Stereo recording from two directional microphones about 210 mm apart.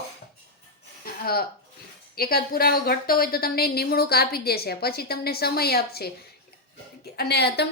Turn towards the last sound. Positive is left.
turn(degrees=50)  # may be behind; listen again after turning